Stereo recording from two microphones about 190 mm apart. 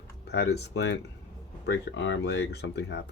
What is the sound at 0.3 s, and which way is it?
Speech, 60° left (ahead or behind).